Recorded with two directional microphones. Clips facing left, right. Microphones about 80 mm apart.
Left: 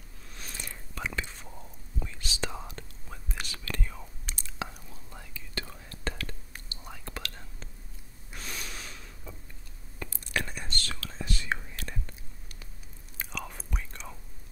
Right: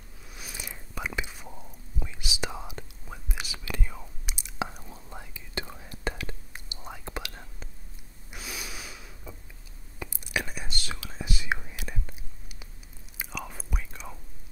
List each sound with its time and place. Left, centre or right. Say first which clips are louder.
0.3 s whispering: right 1 dB; centre
4.6 s whispering: right 4 dB; right
8.3 s gasp: right 1 dB; centre
9.9 s whispering: right 1 dB; centre